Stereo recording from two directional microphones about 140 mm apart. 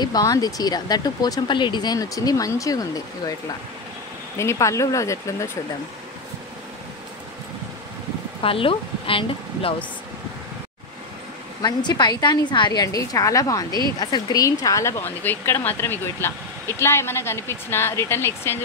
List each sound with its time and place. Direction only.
0.0 s speech: 25° left (ahead or behind)
4.4 s speech: 20° left (ahead or behind)
8.4 s a woman's voice: 40° left (ahead or behind)
11.6 s speech: 30° left (ahead or behind)